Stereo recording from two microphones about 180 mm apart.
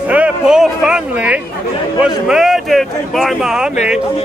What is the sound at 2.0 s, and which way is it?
A man's voice, 5° right (ahead or behind).